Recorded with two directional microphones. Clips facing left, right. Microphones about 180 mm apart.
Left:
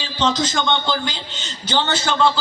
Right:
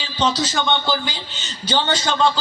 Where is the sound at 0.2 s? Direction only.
10° right (ahead or behind).